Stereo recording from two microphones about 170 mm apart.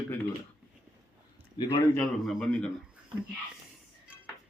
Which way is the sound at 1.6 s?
30° left (ahead or behind).